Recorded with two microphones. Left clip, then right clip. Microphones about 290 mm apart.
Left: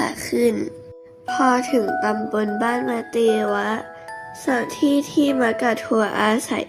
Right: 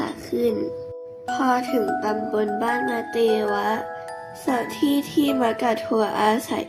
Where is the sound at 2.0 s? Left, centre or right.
Left.